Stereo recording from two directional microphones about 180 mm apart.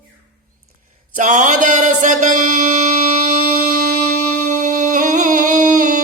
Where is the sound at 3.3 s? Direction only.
50° right (ahead or behind).